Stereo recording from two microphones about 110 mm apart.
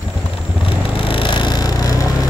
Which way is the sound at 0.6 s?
55° left (ahead or behind).